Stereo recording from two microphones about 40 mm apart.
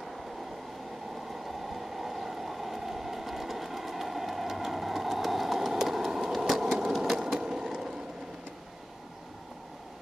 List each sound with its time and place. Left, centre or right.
1.3 s vehicle: centre
6.8 s sewing machine: centre
7.2 s a sound: centre